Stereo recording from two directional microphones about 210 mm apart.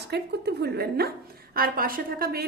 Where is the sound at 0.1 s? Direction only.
50° right (ahead or behind).